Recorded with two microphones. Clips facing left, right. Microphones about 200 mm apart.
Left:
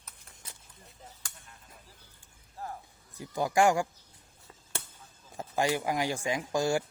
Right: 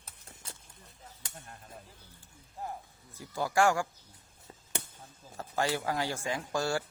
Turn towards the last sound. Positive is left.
turn(degrees=15)  # may be behind; listen again after turning